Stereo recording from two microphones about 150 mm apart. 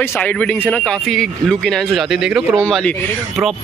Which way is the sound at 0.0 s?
10° left (ahead or behind).